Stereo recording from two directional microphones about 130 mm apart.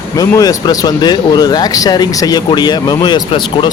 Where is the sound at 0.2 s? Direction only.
30° left (ahead or behind).